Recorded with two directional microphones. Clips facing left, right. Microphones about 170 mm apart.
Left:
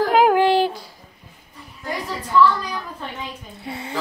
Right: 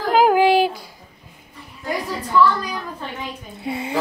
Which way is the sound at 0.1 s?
5° right (ahead or behind).